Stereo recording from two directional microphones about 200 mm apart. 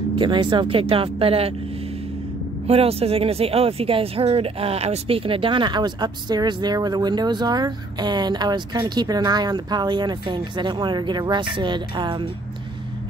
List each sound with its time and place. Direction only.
0.2 s speech: 25° right (ahead or behind)
2.6 s speech: 30° right (ahead or behind)